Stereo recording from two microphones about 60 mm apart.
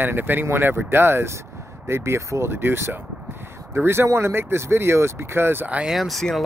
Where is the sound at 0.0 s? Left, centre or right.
Right.